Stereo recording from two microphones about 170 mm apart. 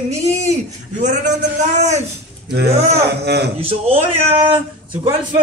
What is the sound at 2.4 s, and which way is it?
Speech, 75° right (ahead or behind).